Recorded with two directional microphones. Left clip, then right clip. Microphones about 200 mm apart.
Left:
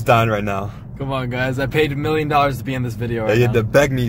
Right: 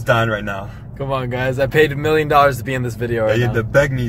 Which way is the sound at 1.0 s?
10° right (ahead or behind).